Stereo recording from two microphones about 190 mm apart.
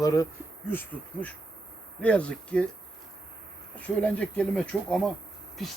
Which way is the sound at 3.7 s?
5° left (ahead or behind).